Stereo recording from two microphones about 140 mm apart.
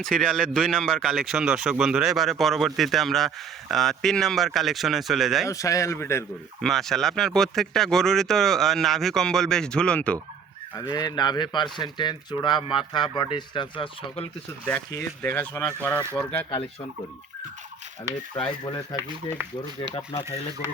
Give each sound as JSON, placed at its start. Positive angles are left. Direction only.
{"t": 0.0, "sound": "speech", "side_deg": 5}
{"t": 5.5, "sound": "speech", "side_deg": 20}
{"t": 6.6, "sound": "speech", "side_deg": 0}
{"t": 10.8, "sound": "speech", "side_deg": 30}
{"t": 15.2, "sound": "speech", "side_deg": 15}
{"t": 18.6, "sound": "speech", "side_deg": 30}
{"t": 20.1, "sound": "speech", "side_deg": 30}